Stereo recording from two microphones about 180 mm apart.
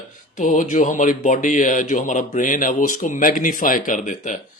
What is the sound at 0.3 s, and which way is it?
Speech, 45° left (ahead or behind).